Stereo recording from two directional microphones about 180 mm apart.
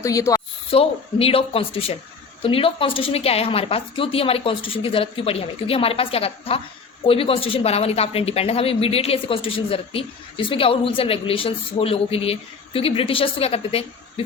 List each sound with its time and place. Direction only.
0.0 s a woman's voice: 20° left (ahead or behind)
0.7 s speech: 30° left (ahead or behind)